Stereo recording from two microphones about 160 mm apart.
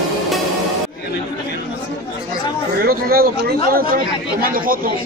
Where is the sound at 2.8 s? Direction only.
70° right (ahead or behind).